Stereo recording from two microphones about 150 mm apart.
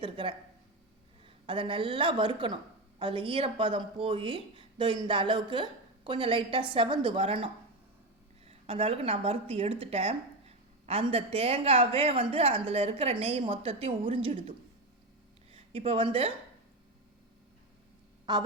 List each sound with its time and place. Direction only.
0.0 s a woman's voice: 35° right (ahead or behind)
1.5 s a woman's voice: 35° right (ahead or behind)
15.5 s a woman's voice: 40° right (ahead or behind)
18.3 s a woman's voice: 25° right (ahead or behind)